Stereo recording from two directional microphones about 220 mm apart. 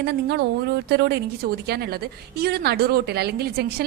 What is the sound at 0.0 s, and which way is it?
Speech, 50° right (ahead or behind).